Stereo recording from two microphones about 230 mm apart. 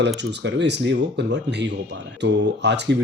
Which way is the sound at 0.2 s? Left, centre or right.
Right.